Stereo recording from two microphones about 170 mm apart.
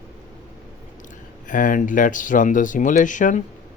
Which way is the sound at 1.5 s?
50° left (ahead or behind).